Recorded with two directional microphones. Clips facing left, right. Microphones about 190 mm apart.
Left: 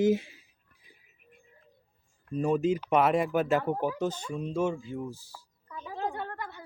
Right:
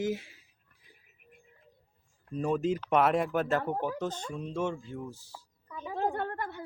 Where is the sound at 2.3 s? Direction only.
5° left (ahead or behind).